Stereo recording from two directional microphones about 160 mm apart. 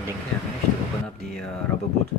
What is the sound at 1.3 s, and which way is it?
Speech, 5° left (ahead or behind).